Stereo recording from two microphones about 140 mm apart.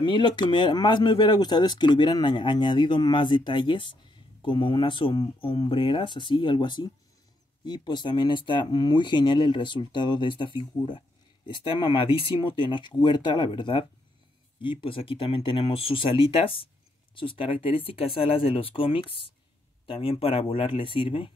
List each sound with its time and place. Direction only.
0.0 s speech: 35° left (ahead or behind)